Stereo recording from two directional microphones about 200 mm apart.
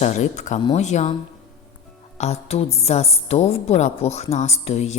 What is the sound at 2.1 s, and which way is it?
Music, 30° left (ahead or behind).